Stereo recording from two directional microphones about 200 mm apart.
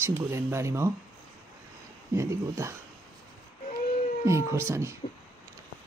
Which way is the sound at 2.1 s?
15° right (ahead or behind).